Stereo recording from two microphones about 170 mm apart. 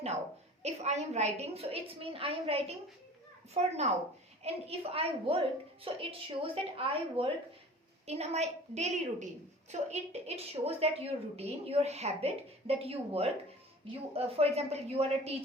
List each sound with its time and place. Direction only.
0.6 s a woman's voice: 40° right (ahead or behind)